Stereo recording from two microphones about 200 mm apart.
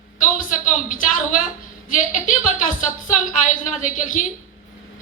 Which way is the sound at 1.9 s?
40° left (ahead or behind).